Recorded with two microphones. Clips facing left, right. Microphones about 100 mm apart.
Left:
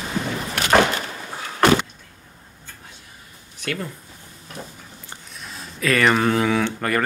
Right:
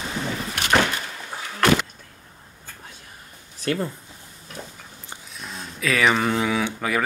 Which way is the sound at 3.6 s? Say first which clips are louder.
Right 4 dB; 30° right (ahead or behind).